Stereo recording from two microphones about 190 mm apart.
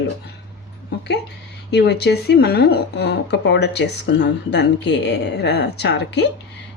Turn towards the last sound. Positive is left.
turn(degrees=65)  # may be behind; listen again after turning